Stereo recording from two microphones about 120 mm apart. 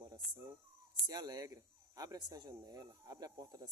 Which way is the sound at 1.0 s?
35° right (ahead or behind).